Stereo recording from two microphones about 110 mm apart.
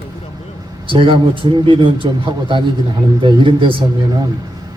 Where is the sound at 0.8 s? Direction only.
50° right (ahead or behind).